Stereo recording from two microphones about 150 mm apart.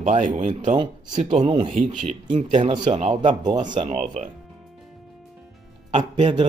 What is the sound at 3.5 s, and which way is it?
Speech, 30° right (ahead or behind).